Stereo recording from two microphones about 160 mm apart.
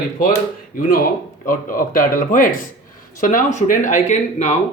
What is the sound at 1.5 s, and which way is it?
Speech, 60° left (ahead or behind).